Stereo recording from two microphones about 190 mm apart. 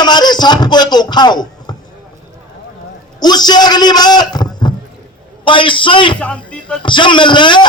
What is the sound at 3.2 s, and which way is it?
A man's voice, 20° left (ahead or behind).